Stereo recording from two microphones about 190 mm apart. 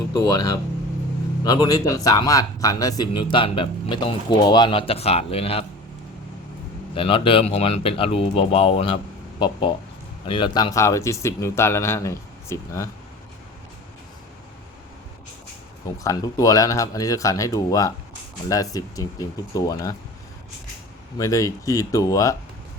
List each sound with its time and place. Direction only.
0.1 s a man's voice: 20° left (ahead or behind)
6.9 s a man's voice: 30° left (ahead or behind)
16.0 s a man's voice: 20° left (ahead or behind)
21.2 s speech: 15° left (ahead or behind)